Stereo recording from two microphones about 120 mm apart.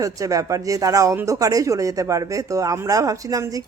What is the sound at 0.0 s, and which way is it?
Speech, 30° right (ahead or behind).